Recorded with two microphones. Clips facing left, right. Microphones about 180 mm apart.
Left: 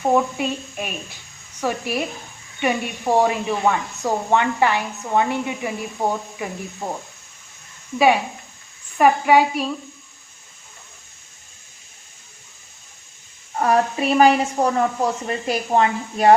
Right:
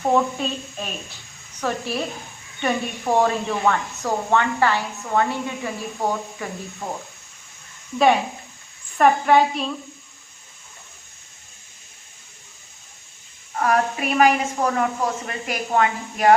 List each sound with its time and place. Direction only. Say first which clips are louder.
0.0 s a woman's voice: left 1 dB; 10° left (ahead or behind)
9.0 s a woman's voice: left 1 dB; 10° left (ahead or behind)
13.6 s a woman's voice: left 2 dB; 30° left (ahead or behind)